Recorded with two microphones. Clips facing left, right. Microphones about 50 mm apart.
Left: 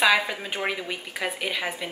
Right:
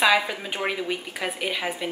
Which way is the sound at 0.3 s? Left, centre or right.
Centre.